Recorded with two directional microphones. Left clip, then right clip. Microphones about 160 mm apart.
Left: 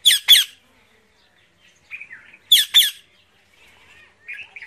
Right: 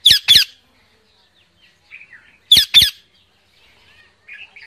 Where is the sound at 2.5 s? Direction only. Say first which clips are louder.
Right 4 dB; 25° right (ahead or behind).